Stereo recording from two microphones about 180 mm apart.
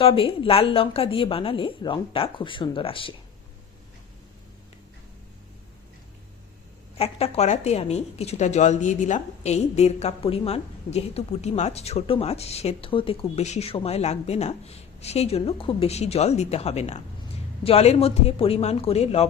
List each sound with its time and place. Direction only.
0.0 s a woman's voice: 30° left (ahead or behind)
7.0 s a woman's voice: 35° left (ahead or behind)